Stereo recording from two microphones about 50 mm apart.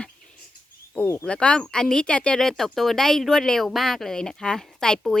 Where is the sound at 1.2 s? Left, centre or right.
Left.